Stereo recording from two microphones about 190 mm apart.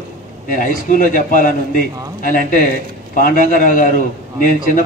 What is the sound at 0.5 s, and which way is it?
A man's voice, 45° left (ahead or behind).